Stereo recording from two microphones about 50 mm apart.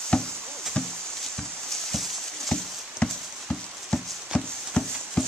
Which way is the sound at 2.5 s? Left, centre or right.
Centre.